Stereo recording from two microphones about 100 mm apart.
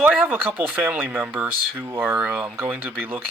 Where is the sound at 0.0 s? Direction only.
15° right (ahead or behind).